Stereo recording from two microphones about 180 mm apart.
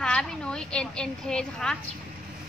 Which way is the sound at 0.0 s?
5° left (ahead or behind).